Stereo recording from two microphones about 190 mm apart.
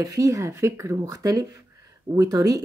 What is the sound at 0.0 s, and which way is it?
Speech, 15° right (ahead or behind).